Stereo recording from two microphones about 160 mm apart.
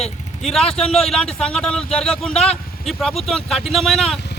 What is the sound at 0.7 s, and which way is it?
A man's voice, 5° left (ahead or behind).